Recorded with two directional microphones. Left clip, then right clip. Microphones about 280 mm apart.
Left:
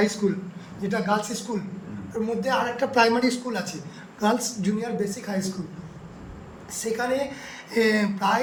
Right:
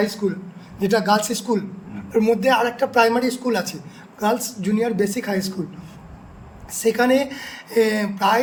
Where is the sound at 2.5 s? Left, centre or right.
Right.